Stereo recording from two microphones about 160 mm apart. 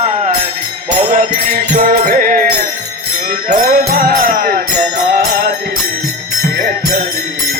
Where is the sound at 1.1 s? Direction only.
55° right (ahead or behind).